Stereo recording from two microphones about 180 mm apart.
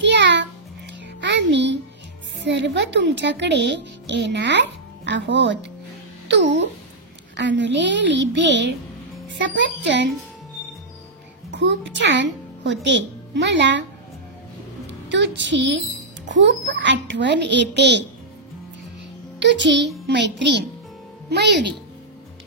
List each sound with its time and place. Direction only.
0.0 s music: 75° right (ahead or behind)
2.4 s a child's voice: 75° right (ahead or behind)
11.5 s a child's voice: 80° right
14.9 s a woman's voice: 85° right
19.4 s a child's voice: 80° right